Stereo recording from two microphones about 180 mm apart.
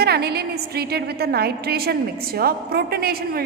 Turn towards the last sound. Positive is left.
turn(degrees=-60)  # may be behind; listen again after turning